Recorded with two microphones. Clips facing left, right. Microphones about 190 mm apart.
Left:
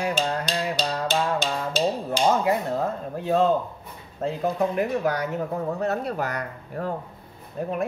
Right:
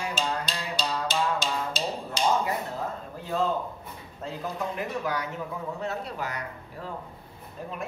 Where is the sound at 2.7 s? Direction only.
65° left (ahead or behind).